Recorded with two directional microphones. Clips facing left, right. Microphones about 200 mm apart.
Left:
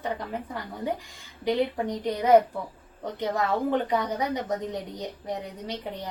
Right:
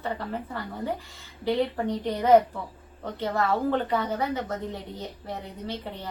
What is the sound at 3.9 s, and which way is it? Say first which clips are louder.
Speech: even; 15° left (ahead or behind).